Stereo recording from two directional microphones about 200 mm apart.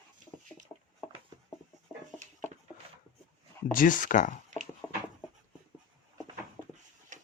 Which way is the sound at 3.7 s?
45° left (ahead or behind).